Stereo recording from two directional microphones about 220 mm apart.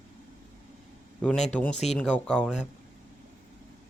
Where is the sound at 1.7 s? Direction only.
30° left (ahead or behind).